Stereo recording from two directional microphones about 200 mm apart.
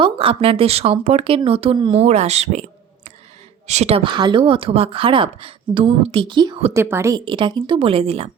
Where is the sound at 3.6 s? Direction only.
35° right (ahead or behind).